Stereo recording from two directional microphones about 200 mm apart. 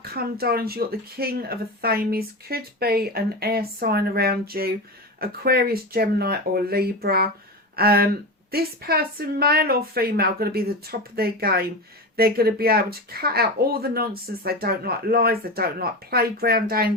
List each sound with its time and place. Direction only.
0.0 s speech: 50° right (ahead or behind)